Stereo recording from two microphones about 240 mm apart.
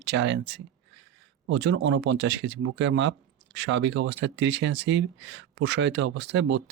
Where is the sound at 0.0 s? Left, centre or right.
Right.